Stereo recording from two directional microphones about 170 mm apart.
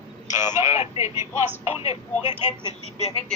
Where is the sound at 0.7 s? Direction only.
40° left (ahead or behind).